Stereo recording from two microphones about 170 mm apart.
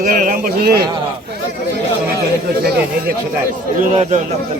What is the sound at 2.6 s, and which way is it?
Speech, 70° right (ahead or behind).